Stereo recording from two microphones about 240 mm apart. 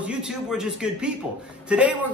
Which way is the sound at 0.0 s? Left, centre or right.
Centre.